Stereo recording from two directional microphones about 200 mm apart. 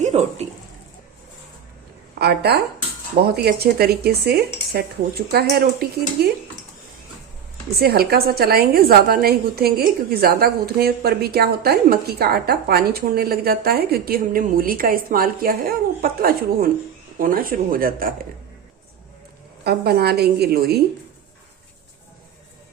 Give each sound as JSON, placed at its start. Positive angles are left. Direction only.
{"t": 0.0, "sound": "speech", "side_deg": -35}
{"t": 2.1, "sound": "a woman's voice", "side_deg": -55}
{"t": 7.8, "sound": "a woman's voice", "side_deg": -50}
{"t": 19.6, "sound": "a woman's voice", "side_deg": -50}